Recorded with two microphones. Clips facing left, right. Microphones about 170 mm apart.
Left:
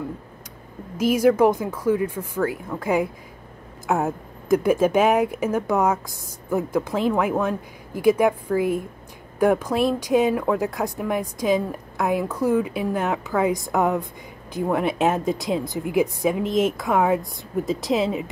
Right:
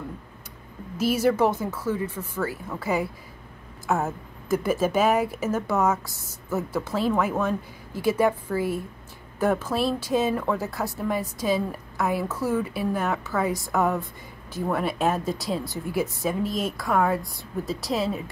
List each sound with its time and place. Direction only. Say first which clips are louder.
1.1 s speech: left 5 dB; 10° left (ahead or behind)